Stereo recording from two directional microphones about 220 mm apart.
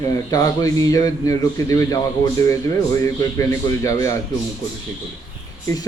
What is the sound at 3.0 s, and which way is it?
Speech, 15° left (ahead or behind).